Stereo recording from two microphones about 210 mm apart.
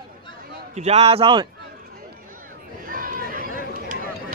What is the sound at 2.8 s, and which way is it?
Chatter, 40° right (ahead or behind).